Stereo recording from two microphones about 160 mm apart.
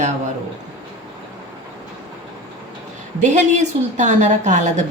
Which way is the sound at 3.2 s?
50° right (ahead or behind).